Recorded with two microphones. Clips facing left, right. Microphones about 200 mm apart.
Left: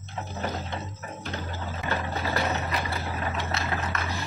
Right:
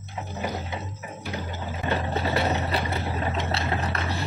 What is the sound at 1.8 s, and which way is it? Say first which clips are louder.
Vehicle: right 4 dB; 25° right (ahead or behind).